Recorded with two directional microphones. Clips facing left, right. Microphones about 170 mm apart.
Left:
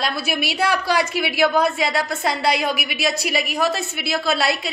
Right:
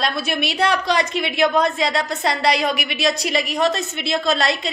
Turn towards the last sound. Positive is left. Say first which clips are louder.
# right 1 dB
turn(degrees=5)  # may be behind; listen again after turning